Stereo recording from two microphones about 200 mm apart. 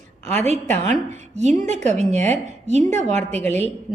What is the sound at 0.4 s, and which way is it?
A woman's voice, 35° right (ahead or behind).